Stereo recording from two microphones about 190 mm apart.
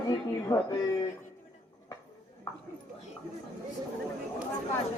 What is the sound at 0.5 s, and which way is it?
Speech, 20° left (ahead or behind).